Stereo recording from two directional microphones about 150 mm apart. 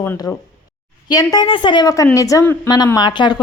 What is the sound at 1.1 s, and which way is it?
A woman's voice, 25° left (ahead or behind).